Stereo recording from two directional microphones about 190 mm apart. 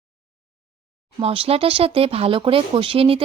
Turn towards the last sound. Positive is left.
turn(degrees=-30)  # may be behind; listen again after turning